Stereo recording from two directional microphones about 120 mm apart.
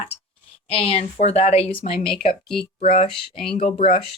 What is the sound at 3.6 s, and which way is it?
Speech, 70° left (ahead or behind).